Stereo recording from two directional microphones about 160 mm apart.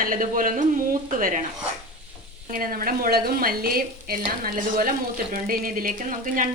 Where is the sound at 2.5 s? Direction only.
60° right (ahead or behind).